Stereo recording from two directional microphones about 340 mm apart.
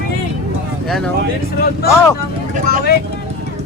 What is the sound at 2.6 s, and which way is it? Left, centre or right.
Speech, left.